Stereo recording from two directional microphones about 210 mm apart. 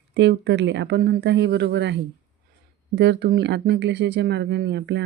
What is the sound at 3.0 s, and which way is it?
Speech, 55° right (ahead or behind).